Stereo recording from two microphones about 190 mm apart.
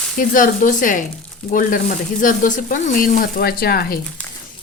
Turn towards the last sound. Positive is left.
turn(degrees=55)  # may be behind; listen again after turning